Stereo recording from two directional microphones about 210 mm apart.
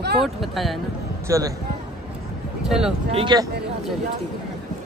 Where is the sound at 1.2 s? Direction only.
15° right (ahead or behind).